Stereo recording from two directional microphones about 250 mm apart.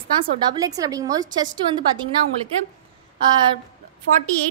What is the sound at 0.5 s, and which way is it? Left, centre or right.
A woman's voice, centre.